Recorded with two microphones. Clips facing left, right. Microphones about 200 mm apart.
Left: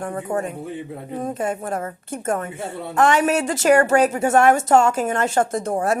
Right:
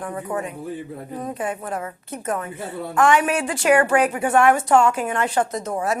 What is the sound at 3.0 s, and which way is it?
A woman's voice, 40° left (ahead or behind).